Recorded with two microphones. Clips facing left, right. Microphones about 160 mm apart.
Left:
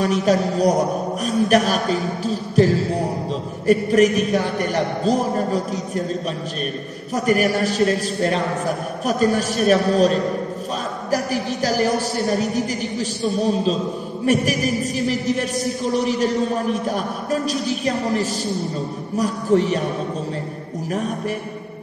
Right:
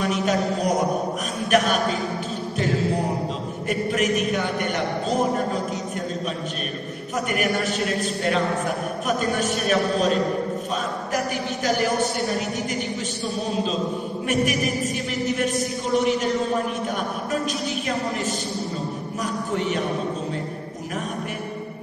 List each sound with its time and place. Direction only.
0.0 s a man's voice: 35° left (ahead or behind)
7.2 s a man's voice: 35° left (ahead or behind)
12.3 s a man's voice: 35° left (ahead or behind)
14.2 s a man's voice: 35° left (ahead or behind)